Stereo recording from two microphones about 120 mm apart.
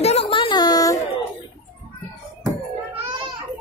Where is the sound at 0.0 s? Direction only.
60° left (ahead or behind).